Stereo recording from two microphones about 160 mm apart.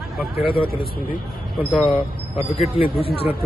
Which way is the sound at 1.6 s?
10° left (ahead or behind).